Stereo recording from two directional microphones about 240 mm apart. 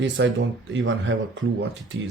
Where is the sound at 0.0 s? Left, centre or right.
Right.